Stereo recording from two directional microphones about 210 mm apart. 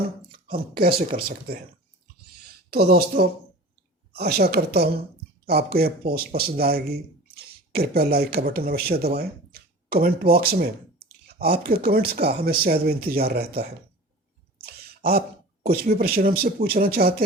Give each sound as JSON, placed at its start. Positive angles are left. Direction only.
{"t": 0.3, "sound": "speech", "side_deg": -45}
{"t": 2.6, "sound": "speech", "side_deg": -45}
{"t": 14.6, "sound": "a sound", "side_deg": -50}
{"t": 15.6, "sound": "speech", "side_deg": -45}